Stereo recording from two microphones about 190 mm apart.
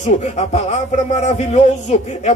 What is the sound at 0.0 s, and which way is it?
A man's voice, 35° left (ahead or behind).